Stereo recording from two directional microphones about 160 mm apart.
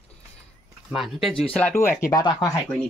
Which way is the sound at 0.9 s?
Centre (ahead or behind).